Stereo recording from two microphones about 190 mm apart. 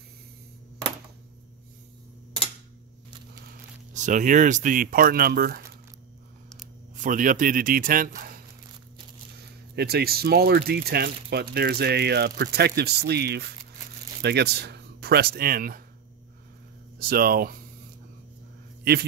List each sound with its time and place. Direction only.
3.9 s speech: 40° right (ahead or behind)
7.0 s speech: 45° right (ahead or behind)
9.8 s speech: 55° right (ahead or behind)
17.0 s speech: 50° right (ahead or behind)